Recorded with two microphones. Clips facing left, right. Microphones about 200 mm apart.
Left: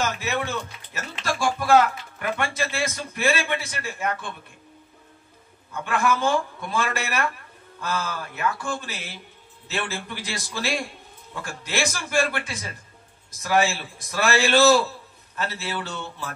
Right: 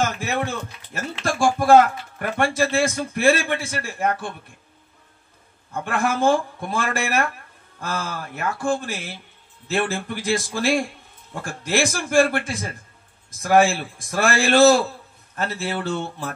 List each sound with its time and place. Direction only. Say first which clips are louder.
0.0 s speech: right 3 dB; 50° right (ahead or behind)
5.7 s speech: even; 50° right (ahead or behind)